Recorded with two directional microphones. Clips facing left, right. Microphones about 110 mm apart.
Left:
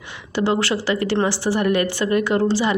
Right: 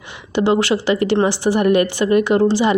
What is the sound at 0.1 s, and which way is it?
A woman's voice, 20° right (ahead or behind).